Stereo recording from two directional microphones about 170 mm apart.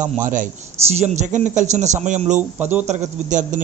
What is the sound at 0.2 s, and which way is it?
A man's voice, 50° right (ahead or behind).